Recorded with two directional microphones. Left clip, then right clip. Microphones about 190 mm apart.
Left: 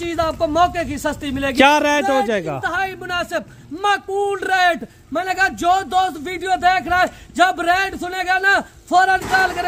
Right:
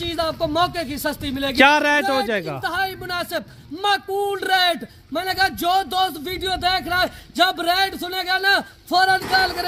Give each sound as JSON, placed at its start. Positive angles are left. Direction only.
{"t": 0.0, "sound": "speech", "side_deg": 0}
{"t": 1.5, "sound": "a man's voice", "side_deg": 15}